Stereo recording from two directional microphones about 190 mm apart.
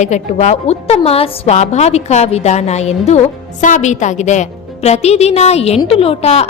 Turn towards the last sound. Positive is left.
turn(degrees=35)  # may be behind; listen again after turning